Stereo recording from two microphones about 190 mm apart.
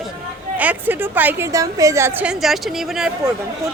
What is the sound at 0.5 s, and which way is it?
A woman's voice, 10° right (ahead or behind).